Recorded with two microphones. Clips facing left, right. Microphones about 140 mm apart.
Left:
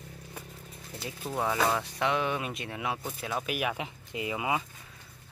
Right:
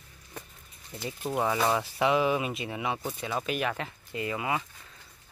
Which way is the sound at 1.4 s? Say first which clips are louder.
Right 1 dB; centre (ahead or behind).